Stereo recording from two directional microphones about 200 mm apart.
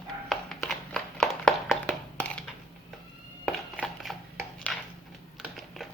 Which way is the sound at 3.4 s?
5° left (ahead or behind).